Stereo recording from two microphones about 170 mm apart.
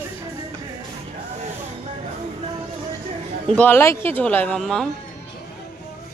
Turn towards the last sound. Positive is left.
turn(degrees=0)  # may be behind; listen again after turning